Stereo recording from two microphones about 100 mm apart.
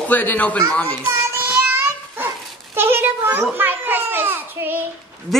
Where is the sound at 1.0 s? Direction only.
20° right (ahead or behind).